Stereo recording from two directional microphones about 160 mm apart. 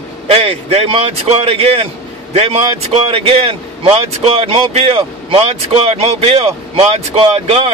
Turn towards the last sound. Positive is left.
turn(degrees=-40)  # may be behind; listen again after turning